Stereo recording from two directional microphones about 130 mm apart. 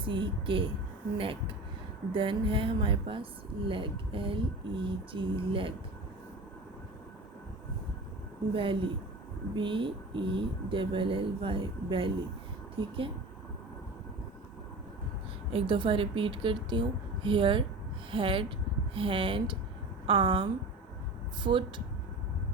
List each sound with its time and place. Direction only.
0.0 s speech: 40° right (ahead or behind)
8.5 s speech: 40° right (ahead or behind)
15.5 s speech: 40° right (ahead or behind)